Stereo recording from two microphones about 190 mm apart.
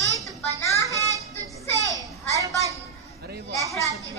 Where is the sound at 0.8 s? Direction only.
15° right (ahead or behind).